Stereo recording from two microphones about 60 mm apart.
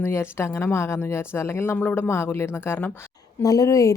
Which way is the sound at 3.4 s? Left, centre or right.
Left.